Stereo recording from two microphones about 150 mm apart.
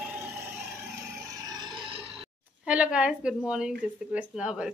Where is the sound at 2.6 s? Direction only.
5° right (ahead or behind).